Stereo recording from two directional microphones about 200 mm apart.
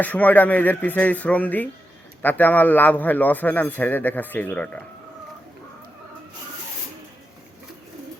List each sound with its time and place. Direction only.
0.0 s a man's voice: 10° left (ahead or behind)